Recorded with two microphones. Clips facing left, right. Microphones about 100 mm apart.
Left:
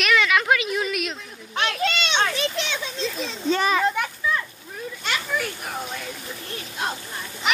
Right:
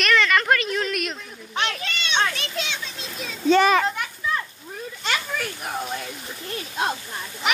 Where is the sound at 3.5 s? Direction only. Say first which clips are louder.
Right 4 dB; 70° right (ahead or behind).